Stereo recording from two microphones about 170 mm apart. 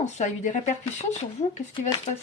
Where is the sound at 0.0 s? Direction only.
45° left (ahead or behind).